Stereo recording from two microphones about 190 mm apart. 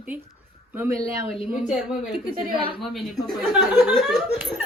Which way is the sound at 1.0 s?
30° left (ahead or behind).